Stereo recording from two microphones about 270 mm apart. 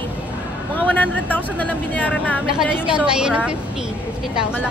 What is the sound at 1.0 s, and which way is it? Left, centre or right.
A woman's voice, centre.